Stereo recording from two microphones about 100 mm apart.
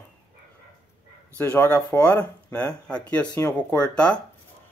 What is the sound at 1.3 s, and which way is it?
Speech, 20° left (ahead or behind).